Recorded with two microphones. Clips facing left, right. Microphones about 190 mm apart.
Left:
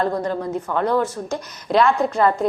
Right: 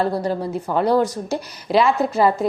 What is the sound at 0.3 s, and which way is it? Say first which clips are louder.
Speech: right 1 dB; 10° right (ahead or behind).